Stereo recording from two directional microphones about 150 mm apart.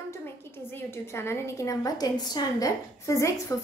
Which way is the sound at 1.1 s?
15° left (ahead or behind).